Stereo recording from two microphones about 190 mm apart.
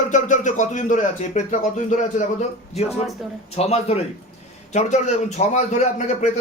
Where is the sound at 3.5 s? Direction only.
35° left (ahead or behind).